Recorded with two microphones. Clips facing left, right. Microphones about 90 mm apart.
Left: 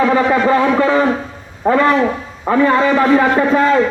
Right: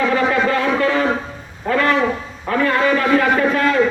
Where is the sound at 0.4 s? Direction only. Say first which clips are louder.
Left 4 dB; 20° left (ahead or behind).